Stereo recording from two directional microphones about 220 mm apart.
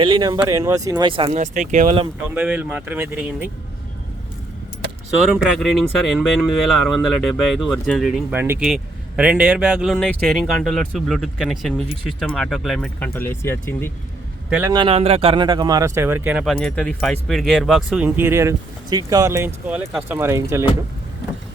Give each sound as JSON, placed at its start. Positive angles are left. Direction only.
{"t": 0.0, "sound": "speech", "side_deg": -20}
{"t": 2.3, "sound": "speech", "side_deg": -5}
{"t": 5.3, "sound": "speech", "side_deg": 0}
{"t": 14.5, "sound": "speech", "side_deg": -15}